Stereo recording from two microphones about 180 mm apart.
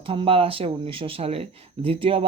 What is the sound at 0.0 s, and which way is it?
Speech, 30° right (ahead or behind).